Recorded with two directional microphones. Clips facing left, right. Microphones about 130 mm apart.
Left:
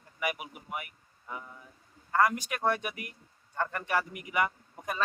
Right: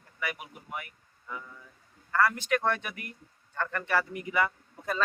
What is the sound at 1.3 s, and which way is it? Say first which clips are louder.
Speech: even; 20° left (ahead or behind).